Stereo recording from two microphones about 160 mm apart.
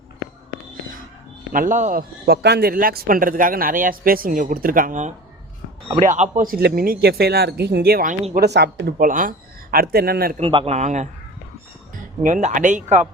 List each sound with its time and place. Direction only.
1.5 s a man's voice: 55° right (ahead or behind); by 8.1 s 70° right (ahead or behind)
8.4 s speech: 90° right; by 9.3 s 55° right (ahead or behind)
9.7 s speech: 75° right (ahead or behind)
10.3 s a man's voice: 35° right (ahead or behind)